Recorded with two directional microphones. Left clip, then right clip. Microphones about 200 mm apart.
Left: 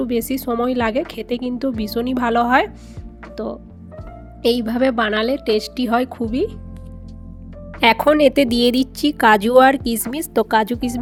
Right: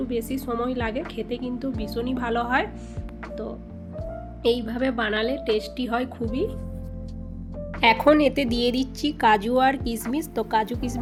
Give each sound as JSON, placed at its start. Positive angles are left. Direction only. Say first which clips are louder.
{"t": 0.0, "sound": "a woman's voice", "louder": "left 7 dB", "side_deg": 55}
{"t": 7.8, "sound": "a woman's voice", "louder": "left 4 dB", "side_deg": 60}